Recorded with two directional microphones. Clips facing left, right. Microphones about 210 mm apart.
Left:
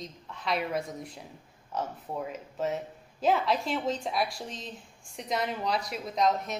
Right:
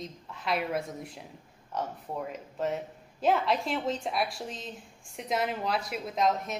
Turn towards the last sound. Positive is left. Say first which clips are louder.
# left 1 dB
turn(degrees=0)  # may be behind; listen again after turning